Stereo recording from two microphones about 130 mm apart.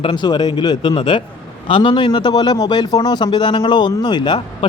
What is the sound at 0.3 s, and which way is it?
A man's voice, 30° left (ahead or behind).